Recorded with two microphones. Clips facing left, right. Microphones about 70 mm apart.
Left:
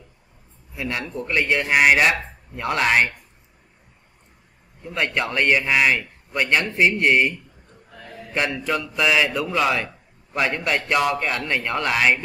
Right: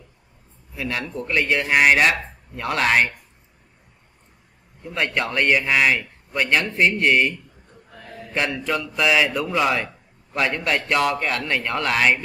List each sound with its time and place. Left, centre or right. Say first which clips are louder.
0.7 s a man's voice: even; centre
4.8 s a man's voice: even; centre